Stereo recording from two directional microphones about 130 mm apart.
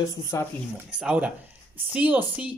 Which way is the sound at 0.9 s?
10° right (ahead or behind).